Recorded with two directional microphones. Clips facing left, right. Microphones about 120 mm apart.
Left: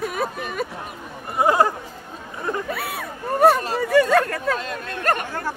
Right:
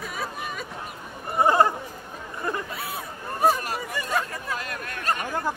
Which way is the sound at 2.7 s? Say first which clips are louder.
Left 4 dB; 65° left (ahead or behind).